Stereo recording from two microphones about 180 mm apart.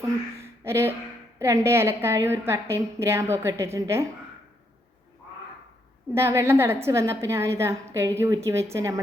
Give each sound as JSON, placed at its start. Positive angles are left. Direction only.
{"t": 0.3, "sound": "a sound", "side_deg": -15}
{"t": 1.4, "sound": "a woman's voice", "side_deg": -15}
{"t": 6.1, "sound": "a woman's voice", "side_deg": -15}